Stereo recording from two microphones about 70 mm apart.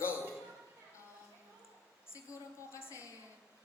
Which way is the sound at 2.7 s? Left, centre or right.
Left.